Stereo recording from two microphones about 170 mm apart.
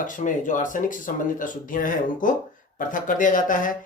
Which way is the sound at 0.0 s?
50° left (ahead or behind).